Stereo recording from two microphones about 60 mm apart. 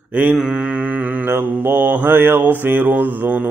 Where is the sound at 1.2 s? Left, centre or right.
Right.